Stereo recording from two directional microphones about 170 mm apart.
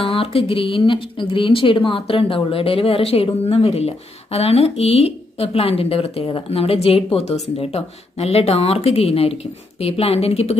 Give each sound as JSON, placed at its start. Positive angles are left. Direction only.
{"t": 0.0, "sound": "speech", "side_deg": 35}